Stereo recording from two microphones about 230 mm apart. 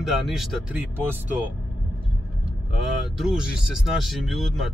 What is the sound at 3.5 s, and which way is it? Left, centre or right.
Speech, centre.